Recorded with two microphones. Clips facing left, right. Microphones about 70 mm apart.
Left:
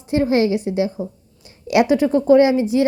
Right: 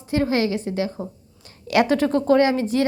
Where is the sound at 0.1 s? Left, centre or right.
Left.